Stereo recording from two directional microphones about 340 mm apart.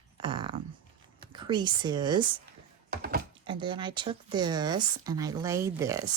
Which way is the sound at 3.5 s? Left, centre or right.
Centre.